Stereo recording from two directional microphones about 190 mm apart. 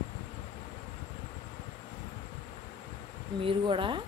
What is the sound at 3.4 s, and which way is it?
Speech, 30° right (ahead or behind).